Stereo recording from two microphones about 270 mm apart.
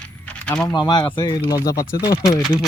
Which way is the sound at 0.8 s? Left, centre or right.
Centre.